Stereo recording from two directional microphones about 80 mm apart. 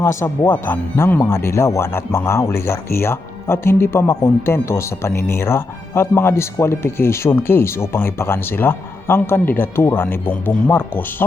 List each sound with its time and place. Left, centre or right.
0.0 s speech: left
0.5 s speech: left